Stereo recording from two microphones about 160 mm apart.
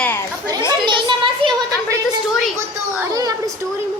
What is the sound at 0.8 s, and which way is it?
Speech, 30° right (ahead or behind).